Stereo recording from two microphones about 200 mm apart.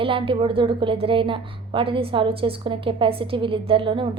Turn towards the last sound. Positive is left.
turn(degrees=-25)  # may be behind; listen again after turning